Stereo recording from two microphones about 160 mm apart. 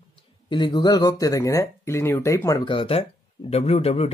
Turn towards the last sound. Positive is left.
turn(degrees=40)  # may be behind; listen again after turning